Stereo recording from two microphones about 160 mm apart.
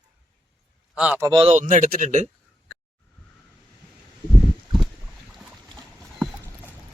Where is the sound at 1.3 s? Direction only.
35° right (ahead or behind).